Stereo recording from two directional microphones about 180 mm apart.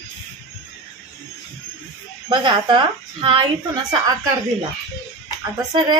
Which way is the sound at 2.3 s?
25° right (ahead or behind).